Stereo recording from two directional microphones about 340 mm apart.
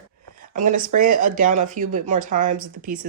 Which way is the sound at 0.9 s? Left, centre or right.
Right.